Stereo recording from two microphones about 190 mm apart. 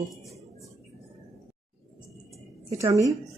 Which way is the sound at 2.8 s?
15° right (ahead or behind).